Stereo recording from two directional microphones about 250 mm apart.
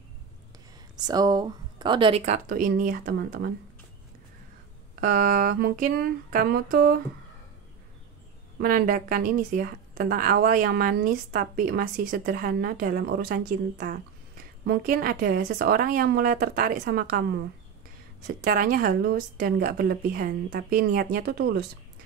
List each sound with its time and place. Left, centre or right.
0.9 s speech: centre; by 3.5 s right
5.0 s a woman's voice: right
8.5 s a woman's voice: right